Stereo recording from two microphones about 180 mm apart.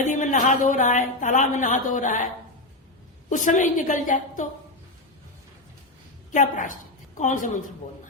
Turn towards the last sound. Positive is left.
turn(degrees=45)  # may be behind; listen again after turning